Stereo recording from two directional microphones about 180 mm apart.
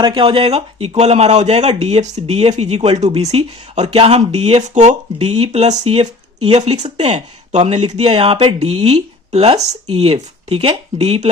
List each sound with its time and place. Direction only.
0.0 s speech: 30° right (ahead or behind)